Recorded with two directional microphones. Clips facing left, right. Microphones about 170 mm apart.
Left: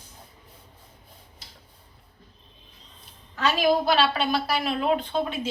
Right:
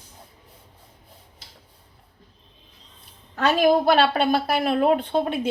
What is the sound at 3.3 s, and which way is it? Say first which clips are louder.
A woman's voice: right 4 dB; 55° right (ahead or behind).